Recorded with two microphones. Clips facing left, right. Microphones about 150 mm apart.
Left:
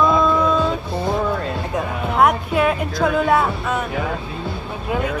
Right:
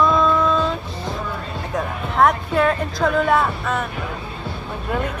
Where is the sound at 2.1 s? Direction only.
10° left (ahead or behind).